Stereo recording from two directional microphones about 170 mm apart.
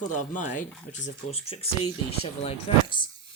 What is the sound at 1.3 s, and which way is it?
A man's voice, 35° left (ahead or behind).